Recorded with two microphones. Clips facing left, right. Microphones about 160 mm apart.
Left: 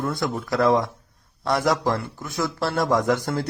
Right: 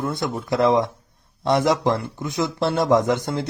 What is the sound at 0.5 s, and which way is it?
Speech, 25° right (ahead or behind).